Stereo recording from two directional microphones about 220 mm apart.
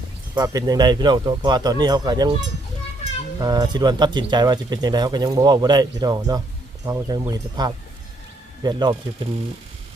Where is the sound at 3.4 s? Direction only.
20° right (ahead or behind).